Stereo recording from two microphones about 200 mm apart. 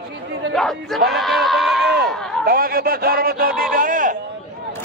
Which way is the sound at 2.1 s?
Centre (ahead or behind).